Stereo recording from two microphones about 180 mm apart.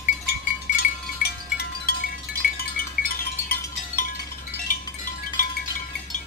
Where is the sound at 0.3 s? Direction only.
60° left (ahead or behind).